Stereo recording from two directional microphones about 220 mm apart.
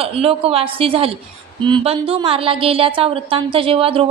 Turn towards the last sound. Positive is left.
turn(degrees=-25)  # may be behind; listen again after turning